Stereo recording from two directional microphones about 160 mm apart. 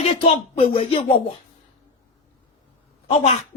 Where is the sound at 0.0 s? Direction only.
40° left (ahead or behind).